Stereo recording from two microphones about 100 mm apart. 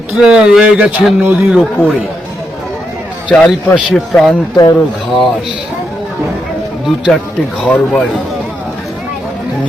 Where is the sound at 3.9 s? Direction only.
Centre (ahead or behind).